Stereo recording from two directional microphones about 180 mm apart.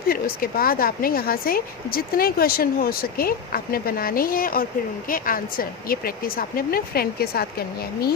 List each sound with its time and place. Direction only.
0.1 s a woman's voice: 55° left (ahead or behind)